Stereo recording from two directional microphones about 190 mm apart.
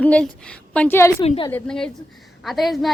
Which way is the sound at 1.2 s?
30° left (ahead or behind).